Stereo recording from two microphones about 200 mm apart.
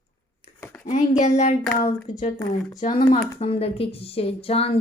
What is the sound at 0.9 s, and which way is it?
Speech, 35° left (ahead or behind).